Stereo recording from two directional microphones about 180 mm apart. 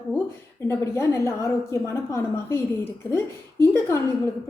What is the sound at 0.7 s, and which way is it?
A woman's voice, 15° left (ahead or behind).